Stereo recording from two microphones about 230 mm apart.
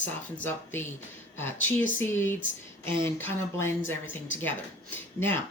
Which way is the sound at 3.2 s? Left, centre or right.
Centre.